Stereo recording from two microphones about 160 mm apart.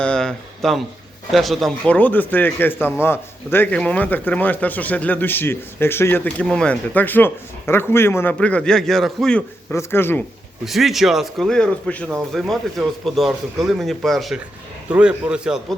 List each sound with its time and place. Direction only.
0.0 s speech: 5° left (ahead or behind)
9.7 s speech: 15° left (ahead or behind)
10.7 s a man's voice: centre (ahead or behind)